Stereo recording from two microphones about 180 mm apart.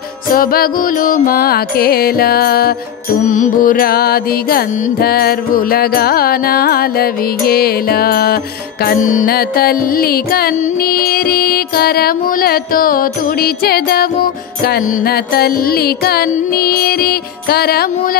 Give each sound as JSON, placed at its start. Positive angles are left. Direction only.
{"t": 0.3, "sound": "music", "side_deg": 55}
{"t": 3.3, "sound": "music", "side_deg": 45}
{"t": 8.8, "sound": "music", "side_deg": 50}